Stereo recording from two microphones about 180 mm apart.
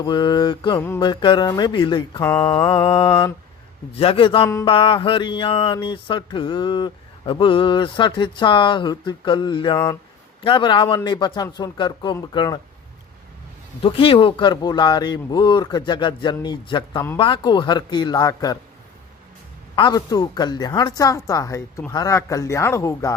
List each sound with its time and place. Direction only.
0.0 s mantra: 25° left (ahead or behind)
2.2 s mantra: 15° left (ahead or behind)
2.6 s mantra: 25° left (ahead or behind)
3.9 s a man's voice: 30° left (ahead or behind)
4.6 s mantra: 30° left (ahead or behind)
13.8 s mantra: 30° left (ahead or behind)
19.7 s mantra: 25° left (ahead or behind)